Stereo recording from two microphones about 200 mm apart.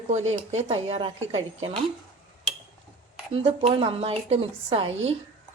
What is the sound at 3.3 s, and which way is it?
Speech, 30° right (ahead or behind).